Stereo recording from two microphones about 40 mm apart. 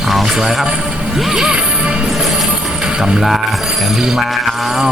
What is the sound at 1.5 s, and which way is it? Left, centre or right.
Smash, right.